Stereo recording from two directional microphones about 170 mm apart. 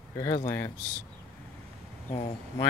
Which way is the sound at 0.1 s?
20° left (ahead or behind).